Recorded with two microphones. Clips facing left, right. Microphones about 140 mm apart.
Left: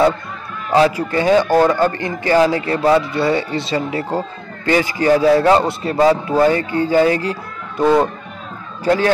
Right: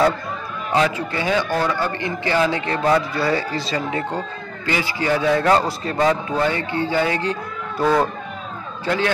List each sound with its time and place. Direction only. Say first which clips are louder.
0.7 s a man's voice: left 6 dB; 35° left (ahead or behind)
8.8 s a man's voice: left 6 dB; 40° left (ahead or behind)